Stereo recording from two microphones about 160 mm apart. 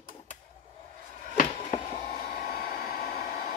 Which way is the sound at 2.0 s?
65° left (ahead or behind).